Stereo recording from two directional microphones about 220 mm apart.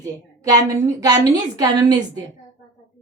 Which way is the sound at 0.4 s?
15° right (ahead or behind).